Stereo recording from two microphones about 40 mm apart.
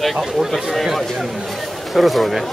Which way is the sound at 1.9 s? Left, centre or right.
Centre.